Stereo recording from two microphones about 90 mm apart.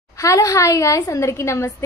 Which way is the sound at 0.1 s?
35° left (ahead or behind).